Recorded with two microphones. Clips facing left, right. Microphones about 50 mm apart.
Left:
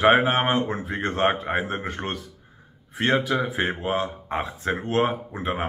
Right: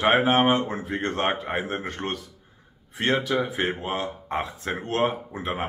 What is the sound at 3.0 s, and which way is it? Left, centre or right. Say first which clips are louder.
Speech: left 1 dB; centre.